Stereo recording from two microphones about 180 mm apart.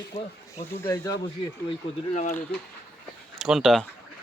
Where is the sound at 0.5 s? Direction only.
20° left (ahead or behind).